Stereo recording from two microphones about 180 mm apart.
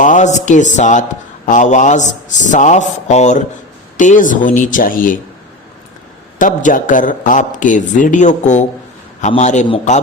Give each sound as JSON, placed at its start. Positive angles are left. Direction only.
{"t": 0.0, "sound": "a man's voice", "side_deg": 45}
{"t": 6.4, "sound": "a man's voice", "side_deg": 45}